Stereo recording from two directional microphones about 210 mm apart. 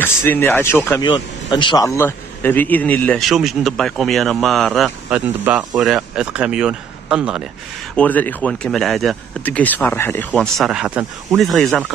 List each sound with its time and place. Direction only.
0.0 s speech: 10° left (ahead or behind)
7.9 s speech: 5° left (ahead or behind)